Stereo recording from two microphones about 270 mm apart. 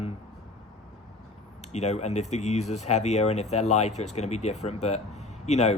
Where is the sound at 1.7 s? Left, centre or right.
Left.